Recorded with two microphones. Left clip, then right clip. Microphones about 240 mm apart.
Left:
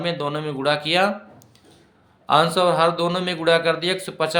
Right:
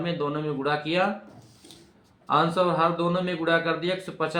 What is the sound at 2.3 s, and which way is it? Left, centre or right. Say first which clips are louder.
A man's voice: left 5 dB; left.